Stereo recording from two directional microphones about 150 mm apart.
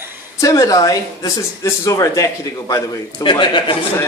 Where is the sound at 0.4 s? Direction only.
20° left (ahead or behind).